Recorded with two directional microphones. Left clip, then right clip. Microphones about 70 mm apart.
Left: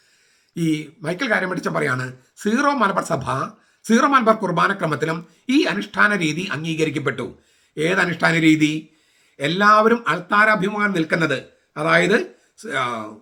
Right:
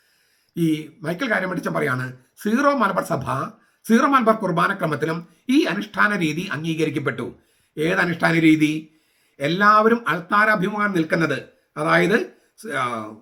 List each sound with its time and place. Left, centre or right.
0.5 s speech: left